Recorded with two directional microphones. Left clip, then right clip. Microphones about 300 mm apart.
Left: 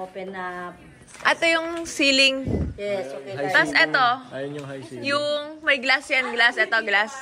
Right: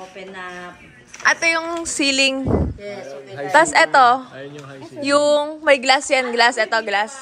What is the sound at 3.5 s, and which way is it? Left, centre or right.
A woman's voice, centre.